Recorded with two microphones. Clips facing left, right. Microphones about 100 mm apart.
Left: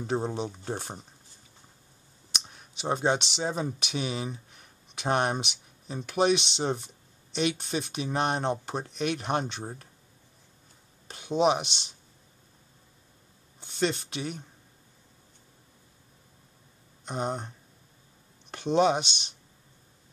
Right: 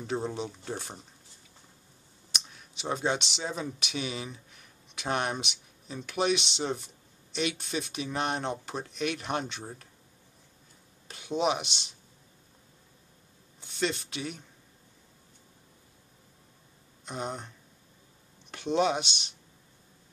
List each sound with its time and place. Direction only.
0.0 s speech: 35° left (ahead or behind)
2.8 s speech: 40° left (ahead or behind)
11.1 s speech: 35° left (ahead or behind)
13.6 s speech: 35° left (ahead or behind)
17.0 s speech: 40° left (ahead or behind)
18.8 s speech: 35° left (ahead or behind)